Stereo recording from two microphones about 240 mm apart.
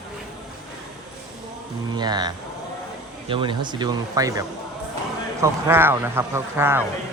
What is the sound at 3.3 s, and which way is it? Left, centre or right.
A man's voice, centre.